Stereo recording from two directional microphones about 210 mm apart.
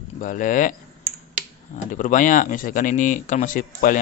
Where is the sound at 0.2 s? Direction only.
40° left (ahead or behind).